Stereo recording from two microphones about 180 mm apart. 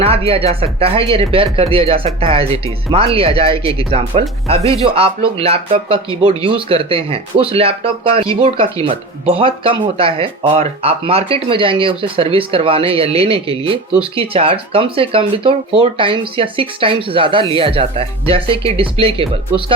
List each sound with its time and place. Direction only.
0.0 s speech: 35° right (ahead or behind)